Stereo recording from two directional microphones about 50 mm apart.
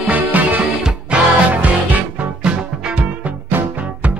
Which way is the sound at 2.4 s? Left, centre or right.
Centre.